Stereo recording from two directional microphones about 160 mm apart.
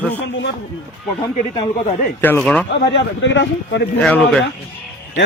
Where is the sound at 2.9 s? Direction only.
90° left.